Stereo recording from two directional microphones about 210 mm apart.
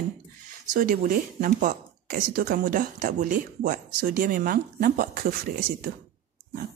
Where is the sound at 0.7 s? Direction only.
40° right (ahead or behind).